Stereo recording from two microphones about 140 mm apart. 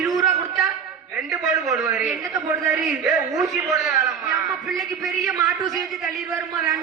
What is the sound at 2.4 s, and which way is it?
Speech, 25° right (ahead or behind).